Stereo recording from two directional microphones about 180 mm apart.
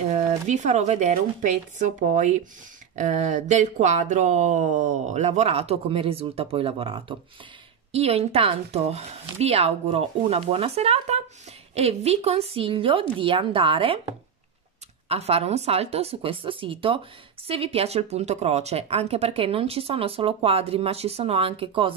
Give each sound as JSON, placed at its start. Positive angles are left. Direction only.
{"t": 0.1, "sound": "speech", "side_deg": -35}
{"t": 15.0, "sound": "speech", "side_deg": -35}